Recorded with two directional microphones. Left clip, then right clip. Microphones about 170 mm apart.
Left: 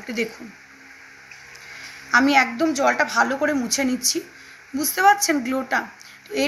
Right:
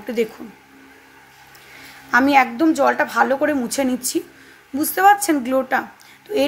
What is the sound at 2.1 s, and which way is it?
A woman's voice, 45° right (ahead or behind).